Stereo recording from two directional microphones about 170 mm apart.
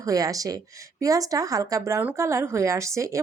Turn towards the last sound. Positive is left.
turn(degrees=-20)  # may be behind; listen again after turning